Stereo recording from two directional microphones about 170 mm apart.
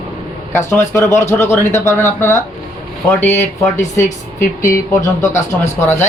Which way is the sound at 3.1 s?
10° left (ahead or behind).